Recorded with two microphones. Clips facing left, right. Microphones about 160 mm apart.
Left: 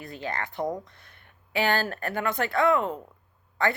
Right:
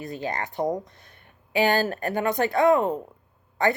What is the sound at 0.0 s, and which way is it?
Speech, 15° right (ahead or behind).